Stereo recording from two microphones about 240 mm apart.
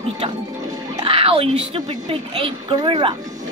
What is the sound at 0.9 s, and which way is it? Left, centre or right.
A woman's voice, right.